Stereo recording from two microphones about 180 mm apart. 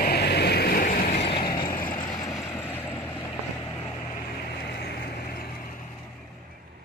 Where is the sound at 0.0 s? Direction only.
65° left (ahead or behind).